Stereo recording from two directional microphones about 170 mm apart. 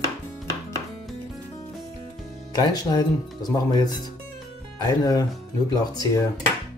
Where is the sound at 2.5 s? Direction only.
25° left (ahead or behind).